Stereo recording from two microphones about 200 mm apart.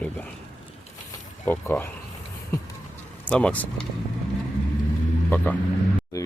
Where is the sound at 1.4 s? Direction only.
10° left (ahead or behind).